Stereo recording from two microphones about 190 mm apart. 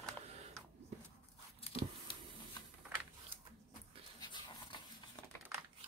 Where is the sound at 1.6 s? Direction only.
30° left (ahead or behind).